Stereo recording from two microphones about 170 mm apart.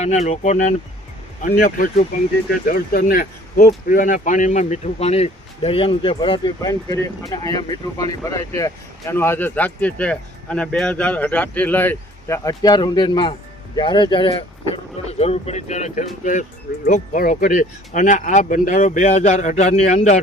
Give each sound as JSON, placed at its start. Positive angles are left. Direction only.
{"t": 0.0, "sound": "speech", "side_deg": 40}
{"t": 1.5, "sound": "speech", "side_deg": 55}
{"t": 3.7, "sound": "speech", "side_deg": 50}